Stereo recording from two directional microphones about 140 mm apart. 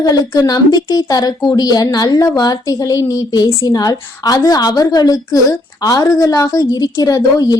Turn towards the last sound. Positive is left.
turn(degrees=30)  # may be behind; listen again after turning